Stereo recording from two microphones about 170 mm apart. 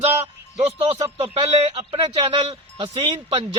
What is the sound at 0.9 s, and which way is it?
A man's voice, 35° right (ahead or behind).